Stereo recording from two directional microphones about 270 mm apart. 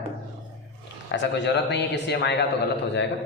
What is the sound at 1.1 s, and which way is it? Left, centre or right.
A man's voice, left.